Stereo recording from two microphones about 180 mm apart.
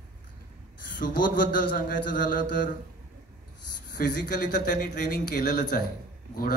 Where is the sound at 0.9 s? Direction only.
50° left (ahead or behind).